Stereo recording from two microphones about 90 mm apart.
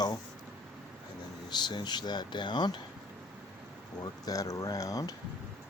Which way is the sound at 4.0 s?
45° left (ahead or behind).